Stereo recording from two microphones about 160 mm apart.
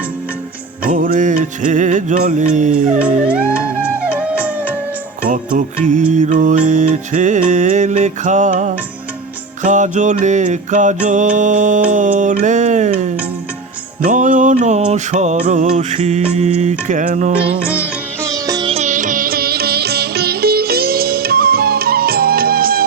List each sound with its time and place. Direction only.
0.9 s music: 55° right (ahead or behind)
3.0 s music: 10° right (ahead or behind)
5.8 s music: 50° right (ahead or behind)
18.4 s music: 25° right (ahead or behind)
18.7 s music: 45° right (ahead or behind); by 22.8 s 70° right (ahead or behind)